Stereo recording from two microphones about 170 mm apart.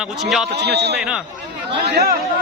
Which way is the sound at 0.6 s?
80° right.